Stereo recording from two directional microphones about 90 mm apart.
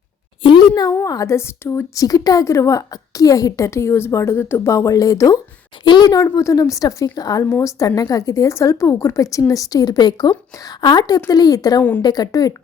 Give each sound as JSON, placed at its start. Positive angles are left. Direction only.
{"t": 0.8, "sound": "a woman's voice", "side_deg": 40}
{"t": 4.7, "sound": "a woman's voice", "side_deg": 35}
{"t": 5.8, "sound": "a woman's voice", "side_deg": 60}
{"t": 6.3, "sound": "a woman's voice", "side_deg": 35}
{"t": 11.8, "sound": "a woman's voice", "side_deg": 20}
{"t": 12.0, "sound": "a woman's voice", "side_deg": 50}